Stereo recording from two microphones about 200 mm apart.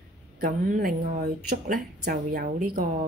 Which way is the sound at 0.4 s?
45° right (ahead or behind).